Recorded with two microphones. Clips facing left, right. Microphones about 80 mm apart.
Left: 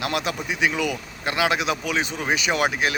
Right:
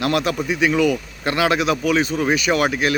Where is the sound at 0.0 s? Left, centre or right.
Centre.